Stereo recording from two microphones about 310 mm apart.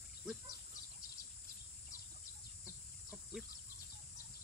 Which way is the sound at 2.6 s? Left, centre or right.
Centre.